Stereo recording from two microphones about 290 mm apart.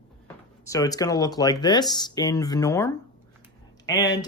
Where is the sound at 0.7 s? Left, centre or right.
Centre.